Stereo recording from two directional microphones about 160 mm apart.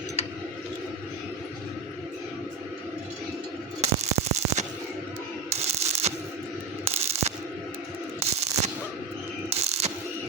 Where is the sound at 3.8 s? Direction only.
45° right (ahead or behind).